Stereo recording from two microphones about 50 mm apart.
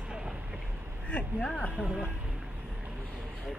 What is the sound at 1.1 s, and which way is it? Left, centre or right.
Speech, left.